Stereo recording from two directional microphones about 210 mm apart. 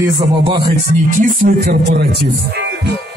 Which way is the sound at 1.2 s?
40° right (ahead or behind).